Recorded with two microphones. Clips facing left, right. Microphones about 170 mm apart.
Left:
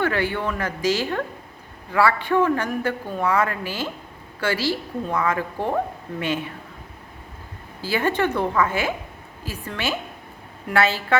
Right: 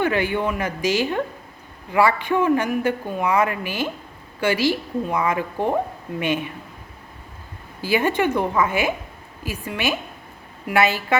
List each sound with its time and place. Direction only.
0.0 s speech: 15° right (ahead or behind)
7.8 s speech: 15° right (ahead or behind)